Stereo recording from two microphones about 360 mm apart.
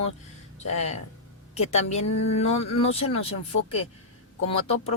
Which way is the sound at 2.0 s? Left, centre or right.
Left.